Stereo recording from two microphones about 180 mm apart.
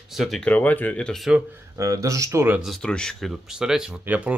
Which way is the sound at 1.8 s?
20° right (ahead or behind).